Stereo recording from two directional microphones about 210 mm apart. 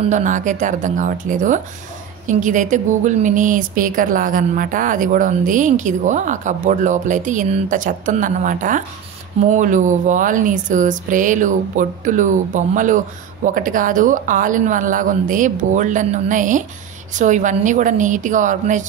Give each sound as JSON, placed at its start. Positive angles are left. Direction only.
{"t": 0.0, "sound": "speech", "side_deg": -35}